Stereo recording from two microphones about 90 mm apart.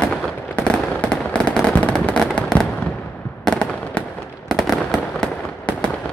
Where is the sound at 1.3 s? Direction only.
10° left (ahead or behind).